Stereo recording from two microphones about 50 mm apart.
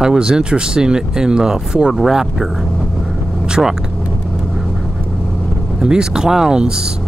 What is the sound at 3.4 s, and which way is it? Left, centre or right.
Vehicle, centre.